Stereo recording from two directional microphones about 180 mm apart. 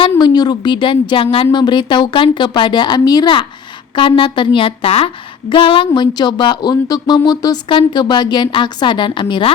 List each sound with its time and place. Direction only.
0.2 s a woman's voice: 25° left (ahead or behind)